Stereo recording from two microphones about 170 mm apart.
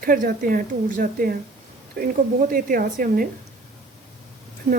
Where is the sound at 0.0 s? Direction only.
55° right (ahead or behind).